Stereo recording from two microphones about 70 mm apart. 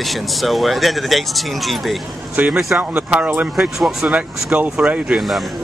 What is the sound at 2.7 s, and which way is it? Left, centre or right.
Speech, right.